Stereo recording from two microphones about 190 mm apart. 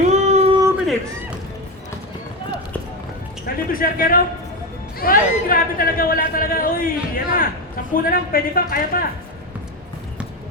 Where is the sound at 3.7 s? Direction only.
50° left (ahead or behind).